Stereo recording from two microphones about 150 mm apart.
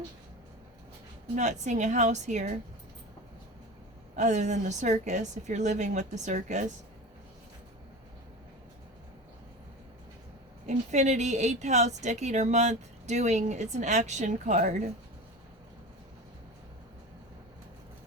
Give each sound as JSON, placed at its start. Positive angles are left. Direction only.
{"t": 1.4, "sound": "a woman's voice", "side_deg": -50}
{"t": 4.1, "sound": "a woman's voice", "side_deg": -50}
{"t": 10.7, "sound": "a woman's voice", "side_deg": -50}